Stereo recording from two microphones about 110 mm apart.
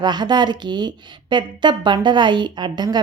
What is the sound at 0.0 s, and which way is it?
A woman's voice, 40° right (ahead or behind).